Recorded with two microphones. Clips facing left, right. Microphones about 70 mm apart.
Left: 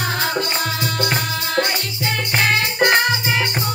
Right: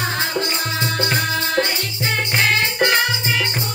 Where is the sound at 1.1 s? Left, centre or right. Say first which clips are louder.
Right 1 dB; right.